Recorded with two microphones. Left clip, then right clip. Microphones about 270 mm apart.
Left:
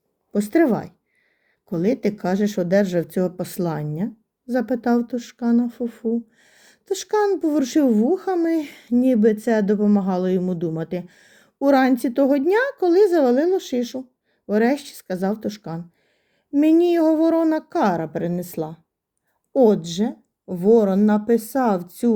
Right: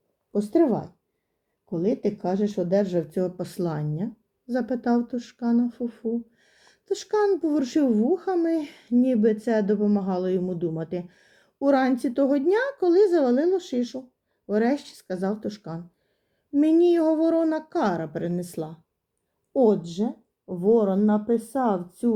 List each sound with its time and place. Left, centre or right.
0.3 s a woman's voice: left